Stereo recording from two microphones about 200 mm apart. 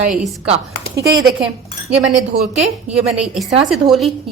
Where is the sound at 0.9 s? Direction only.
15° right (ahead or behind).